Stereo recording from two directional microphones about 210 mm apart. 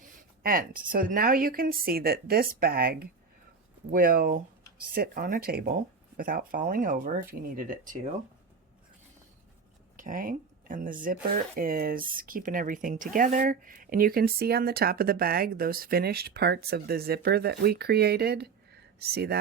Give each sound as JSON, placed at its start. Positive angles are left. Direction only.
{"t": 0.0, "sound": "speech", "side_deg": -40}
{"t": 10.0, "sound": "speech", "side_deg": -40}